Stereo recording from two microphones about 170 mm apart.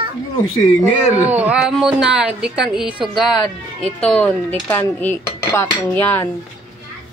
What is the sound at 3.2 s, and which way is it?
Speech, 25° left (ahead or behind).